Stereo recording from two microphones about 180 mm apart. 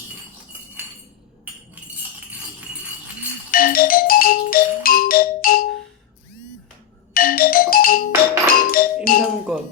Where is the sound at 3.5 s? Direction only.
55° left (ahead or behind).